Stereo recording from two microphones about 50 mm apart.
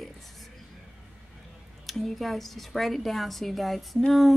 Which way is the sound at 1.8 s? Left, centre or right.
Centre.